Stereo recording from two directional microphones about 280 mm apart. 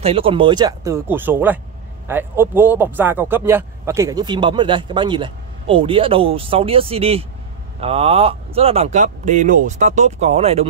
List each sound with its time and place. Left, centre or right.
0.0 s a man's voice: centre